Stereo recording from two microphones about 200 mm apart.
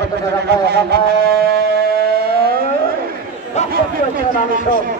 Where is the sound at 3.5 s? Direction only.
35° left (ahead or behind).